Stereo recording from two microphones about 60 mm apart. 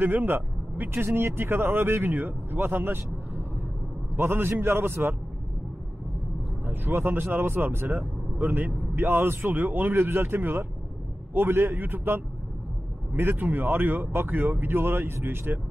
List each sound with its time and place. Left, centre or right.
0.0 s speech: right
6.6 s speech: right